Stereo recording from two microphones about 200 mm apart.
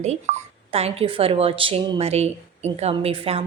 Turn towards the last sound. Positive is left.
turn(degrees=-30)  # may be behind; listen again after turning